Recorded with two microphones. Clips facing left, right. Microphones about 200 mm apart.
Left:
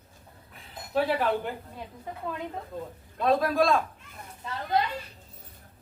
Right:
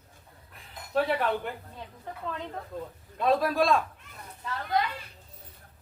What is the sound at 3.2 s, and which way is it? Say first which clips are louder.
Speech: left 1 dB; centre (ahead or behind).